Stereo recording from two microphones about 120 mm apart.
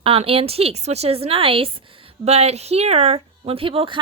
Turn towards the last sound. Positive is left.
turn(degrees=-45)  # may be behind; listen again after turning